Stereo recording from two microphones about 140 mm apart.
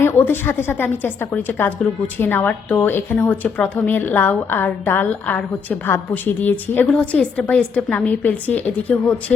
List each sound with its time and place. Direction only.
0.0 s a woman's voice: 15° left (ahead or behind)